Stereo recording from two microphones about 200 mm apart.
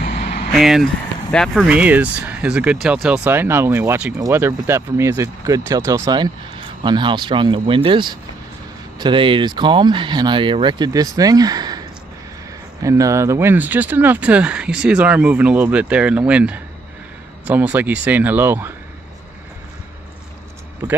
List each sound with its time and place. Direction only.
0.5 s speech: centre (ahead or behind); by 11.8 s 20° right (ahead or behind)
12.8 s speech: 15° right (ahead or behind)